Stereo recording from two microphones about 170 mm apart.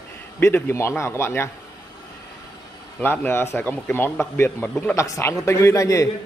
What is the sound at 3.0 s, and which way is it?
A man's voice, 15° left (ahead or behind).